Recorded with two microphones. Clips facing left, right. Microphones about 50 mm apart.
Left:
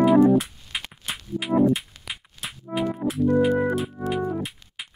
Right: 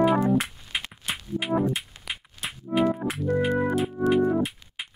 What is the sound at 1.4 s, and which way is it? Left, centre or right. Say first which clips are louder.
Music: left 5 dB; centre.